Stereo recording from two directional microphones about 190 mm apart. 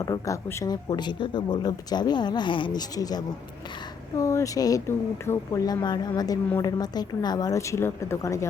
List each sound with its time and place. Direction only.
0.0 s a woman's voice: 15° left (ahead or behind)